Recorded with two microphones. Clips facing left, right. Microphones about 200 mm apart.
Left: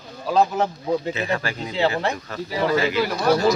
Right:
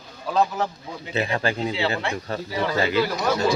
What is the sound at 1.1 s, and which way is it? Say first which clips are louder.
Speech: right 1 dB; 35° right (ahead or behind).